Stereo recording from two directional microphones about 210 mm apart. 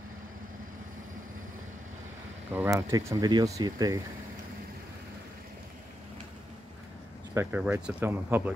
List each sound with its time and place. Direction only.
2.5 s speech: 10° right (ahead or behind)
7.3 s speech: 10° right (ahead or behind)